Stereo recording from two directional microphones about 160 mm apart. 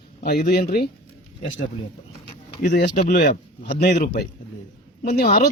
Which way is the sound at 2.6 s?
90° left.